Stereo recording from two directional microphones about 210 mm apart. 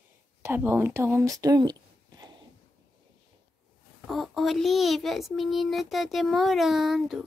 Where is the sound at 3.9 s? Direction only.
Centre (ahead or behind).